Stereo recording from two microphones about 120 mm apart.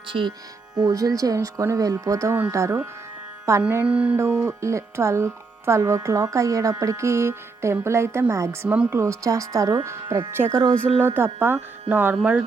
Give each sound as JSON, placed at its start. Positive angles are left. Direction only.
{"t": 0.1, "sound": "speech", "side_deg": -45}
{"t": 0.8, "sound": "speech", "side_deg": -30}
{"t": 3.8, "sound": "speech", "side_deg": -10}
{"t": 4.4, "sound": "speech", "side_deg": -25}